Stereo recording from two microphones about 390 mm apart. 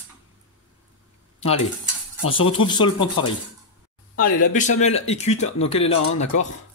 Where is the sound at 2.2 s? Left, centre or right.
Centre.